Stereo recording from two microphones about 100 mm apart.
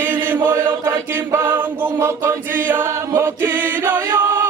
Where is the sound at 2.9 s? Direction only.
30° right (ahead or behind).